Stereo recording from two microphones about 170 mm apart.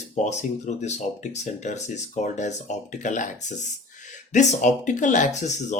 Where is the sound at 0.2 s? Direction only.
45° left (ahead or behind).